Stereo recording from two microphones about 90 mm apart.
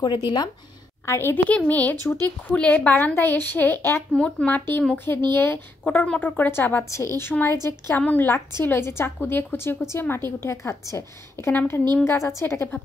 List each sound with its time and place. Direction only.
1.0 s a woman's voice: 25° left (ahead or behind)
4.1 s a woman's voice: 15° left (ahead or behind); by 12.8 s 30° left (ahead or behind)